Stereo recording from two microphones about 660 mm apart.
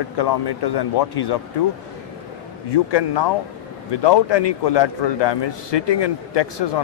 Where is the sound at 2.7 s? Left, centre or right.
Left.